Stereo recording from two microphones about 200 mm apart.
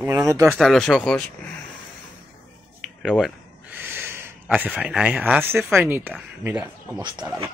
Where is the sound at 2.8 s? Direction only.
5° right (ahead or behind).